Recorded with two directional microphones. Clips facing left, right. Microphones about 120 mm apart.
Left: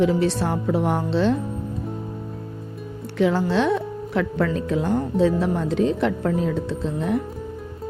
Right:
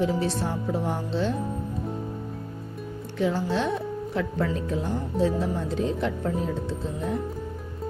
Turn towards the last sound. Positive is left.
turn(degrees=80)